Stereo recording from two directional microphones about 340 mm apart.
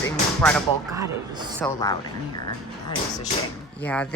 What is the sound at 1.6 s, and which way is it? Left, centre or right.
Speech, centre.